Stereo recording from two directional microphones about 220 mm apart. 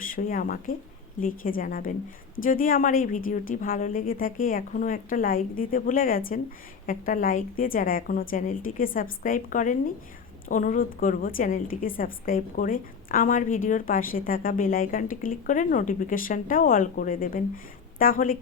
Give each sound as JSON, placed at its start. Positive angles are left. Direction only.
{"t": 0.3, "sound": "a woman's voice", "side_deg": 40}